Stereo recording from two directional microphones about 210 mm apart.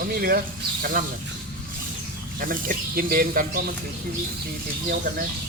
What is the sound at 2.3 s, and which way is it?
Speech, 40° right (ahead or behind).